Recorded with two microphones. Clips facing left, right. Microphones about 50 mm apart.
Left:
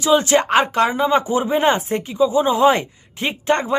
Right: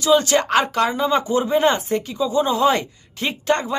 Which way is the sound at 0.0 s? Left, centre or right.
Left.